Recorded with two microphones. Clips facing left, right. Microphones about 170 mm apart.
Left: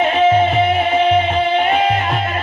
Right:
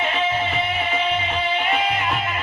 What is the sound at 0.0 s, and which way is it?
Music, 45° left (ahead or behind).